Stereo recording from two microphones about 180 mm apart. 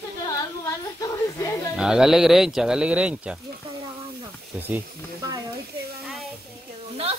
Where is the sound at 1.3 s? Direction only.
15° left (ahead or behind).